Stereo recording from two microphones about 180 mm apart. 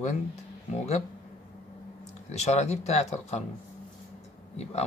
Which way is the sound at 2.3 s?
40° left (ahead or behind).